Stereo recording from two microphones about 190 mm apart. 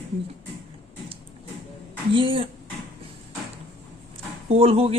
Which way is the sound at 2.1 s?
30° right (ahead or behind).